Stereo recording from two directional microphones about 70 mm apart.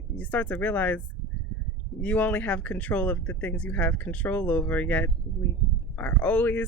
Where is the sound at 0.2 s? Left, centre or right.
Left.